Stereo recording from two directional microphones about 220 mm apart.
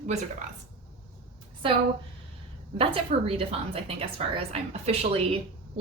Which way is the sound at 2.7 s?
25° right (ahead or behind).